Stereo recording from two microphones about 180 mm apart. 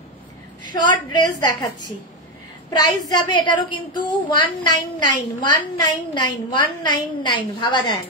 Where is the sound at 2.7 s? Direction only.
20° left (ahead or behind).